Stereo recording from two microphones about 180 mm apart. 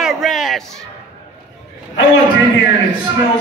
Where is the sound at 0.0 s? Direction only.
Centre (ahead or behind).